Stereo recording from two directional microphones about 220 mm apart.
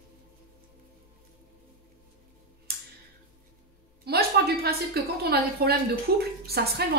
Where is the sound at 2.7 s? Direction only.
45° right (ahead or behind).